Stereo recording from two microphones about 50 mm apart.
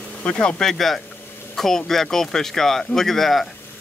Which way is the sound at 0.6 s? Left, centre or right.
Centre.